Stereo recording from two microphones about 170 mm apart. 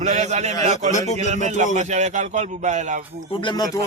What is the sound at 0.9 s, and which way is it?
Speech, 45° left (ahead or behind).